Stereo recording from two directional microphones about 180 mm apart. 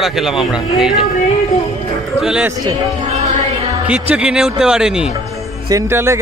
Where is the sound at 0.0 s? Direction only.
Centre (ahead or behind).